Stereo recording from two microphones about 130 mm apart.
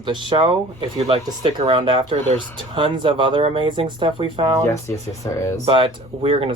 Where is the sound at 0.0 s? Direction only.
35° right (ahead or behind).